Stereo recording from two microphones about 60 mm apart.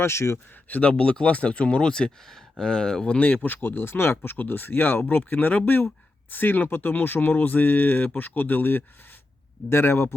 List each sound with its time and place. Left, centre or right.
0.0 s speech: left
0.7 s speech: left